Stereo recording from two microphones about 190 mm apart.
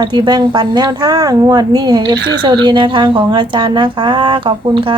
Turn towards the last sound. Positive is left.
turn(degrees=-25)  # may be behind; listen again after turning